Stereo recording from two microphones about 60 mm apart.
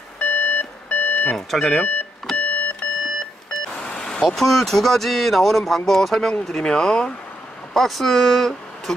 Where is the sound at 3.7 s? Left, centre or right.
Centre.